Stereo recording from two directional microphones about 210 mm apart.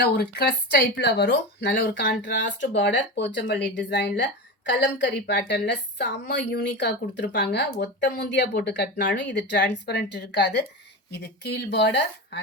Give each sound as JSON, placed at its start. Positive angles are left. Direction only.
{"t": 0.0, "sound": "a woman's voice", "side_deg": 50}